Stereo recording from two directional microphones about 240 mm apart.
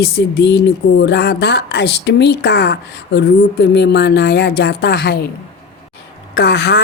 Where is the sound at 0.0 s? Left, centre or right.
Left.